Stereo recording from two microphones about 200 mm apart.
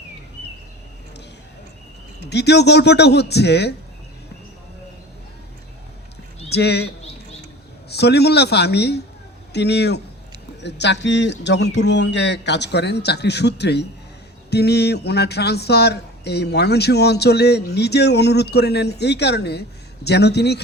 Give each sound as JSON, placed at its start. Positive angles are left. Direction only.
{"t": 2.3, "sound": "speech", "side_deg": 55}
{"t": 6.5, "sound": "speech", "side_deg": 55}